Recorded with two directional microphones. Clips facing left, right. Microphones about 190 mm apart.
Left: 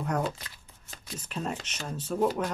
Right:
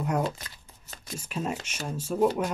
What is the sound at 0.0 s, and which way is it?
Shuffling cards, 10° right (ahead or behind).